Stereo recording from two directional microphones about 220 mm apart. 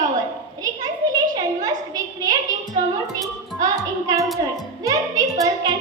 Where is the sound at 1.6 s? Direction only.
15° right (ahead or behind).